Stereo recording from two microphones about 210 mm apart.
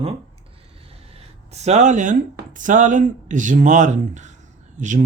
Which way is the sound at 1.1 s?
30° right (ahead or behind).